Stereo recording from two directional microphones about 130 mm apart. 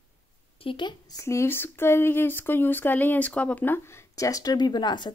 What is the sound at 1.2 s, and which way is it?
Speech, 20° left (ahead or behind).